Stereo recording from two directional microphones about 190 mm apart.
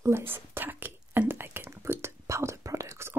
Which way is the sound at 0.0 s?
10° right (ahead or behind).